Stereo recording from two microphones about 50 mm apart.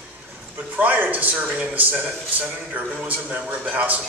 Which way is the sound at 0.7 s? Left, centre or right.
Right.